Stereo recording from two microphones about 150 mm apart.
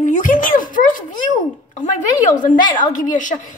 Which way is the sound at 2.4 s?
60° left (ahead or behind).